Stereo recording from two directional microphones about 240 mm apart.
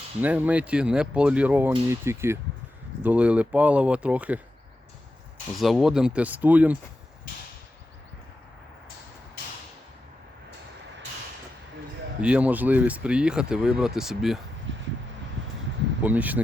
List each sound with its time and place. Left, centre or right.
0.2 s speech: centre
5.5 s speech: centre
12.2 s speech: centre
14.7 s vehicle: right
16.0 s speech: centre